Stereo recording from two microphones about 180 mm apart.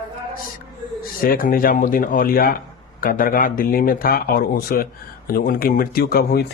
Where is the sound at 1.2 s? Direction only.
55° left (ahead or behind).